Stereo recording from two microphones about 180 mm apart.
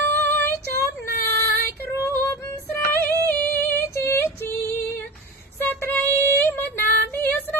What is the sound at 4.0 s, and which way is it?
Female singing, 15° left (ahead or behind).